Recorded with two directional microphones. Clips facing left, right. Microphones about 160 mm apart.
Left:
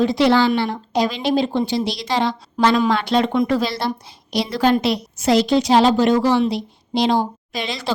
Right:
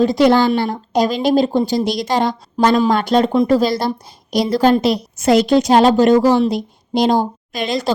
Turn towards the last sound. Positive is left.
turn(degrees=-45)  # may be behind; listen again after turning